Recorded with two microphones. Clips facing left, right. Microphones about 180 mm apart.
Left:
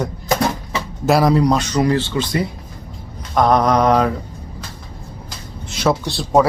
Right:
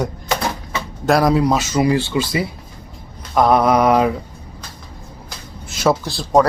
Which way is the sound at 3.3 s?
5° right (ahead or behind).